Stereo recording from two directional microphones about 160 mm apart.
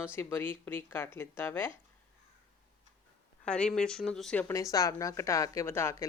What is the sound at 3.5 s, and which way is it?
Speech, 5° left (ahead or behind).